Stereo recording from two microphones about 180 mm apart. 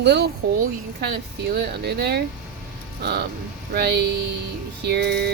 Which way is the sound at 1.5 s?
65° right (ahead or behind).